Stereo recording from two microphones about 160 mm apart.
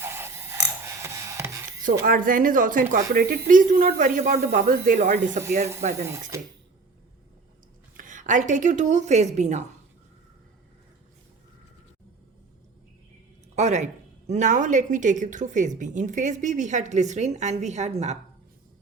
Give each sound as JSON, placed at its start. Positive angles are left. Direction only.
{"t": 0.0, "sound": "mechanisms", "side_deg": -15}
{"t": 1.0, "sound": "a sound", "side_deg": -20}
{"t": 1.8, "sound": "a woman's voice", "side_deg": -60}
{"t": 6.3, "sound": "speech", "side_deg": -20}
{"t": 7.9, "sound": "a woman's voice", "side_deg": -55}
{"t": 13.6, "sound": "a woman's voice", "side_deg": -45}